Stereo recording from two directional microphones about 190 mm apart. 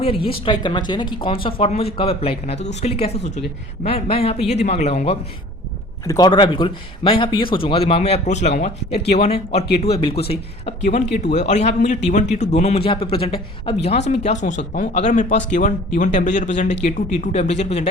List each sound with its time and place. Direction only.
0.0 s speech: 30° left (ahead or behind)
6.1 s speech: 20° left (ahead or behind)